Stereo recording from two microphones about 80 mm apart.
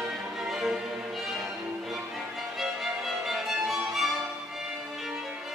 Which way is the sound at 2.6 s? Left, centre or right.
Centre.